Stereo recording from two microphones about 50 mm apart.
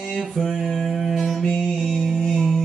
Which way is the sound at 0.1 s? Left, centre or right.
Centre.